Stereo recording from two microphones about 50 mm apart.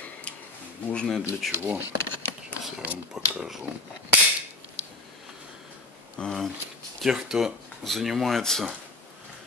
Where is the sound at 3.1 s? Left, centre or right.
Centre.